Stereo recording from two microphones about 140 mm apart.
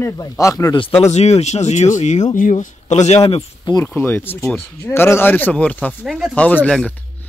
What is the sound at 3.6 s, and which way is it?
Speech, 30° left (ahead or behind).